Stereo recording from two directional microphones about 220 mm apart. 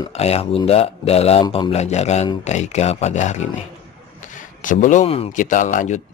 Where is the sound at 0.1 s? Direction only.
30° left (ahead or behind).